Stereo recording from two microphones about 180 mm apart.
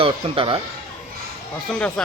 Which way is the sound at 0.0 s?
30° right (ahead or behind).